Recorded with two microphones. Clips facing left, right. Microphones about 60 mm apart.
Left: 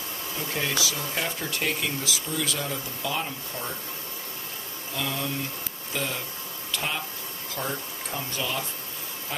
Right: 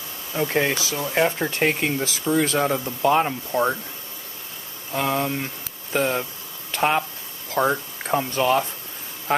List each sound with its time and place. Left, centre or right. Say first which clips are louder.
0.4 s speech: right 7 dB; right
4.9 s speech: right 8 dB; right